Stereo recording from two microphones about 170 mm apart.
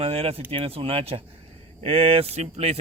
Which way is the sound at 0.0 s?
35° right (ahead or behind).